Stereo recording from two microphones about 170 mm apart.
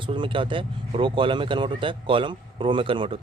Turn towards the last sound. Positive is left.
turn(degrees=-30)  # may be behind; listen again after turning